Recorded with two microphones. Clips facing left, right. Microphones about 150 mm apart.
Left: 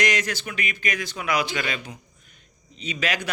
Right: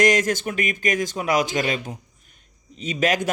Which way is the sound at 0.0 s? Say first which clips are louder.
Right 7 dB; 45° right (ahead or behind).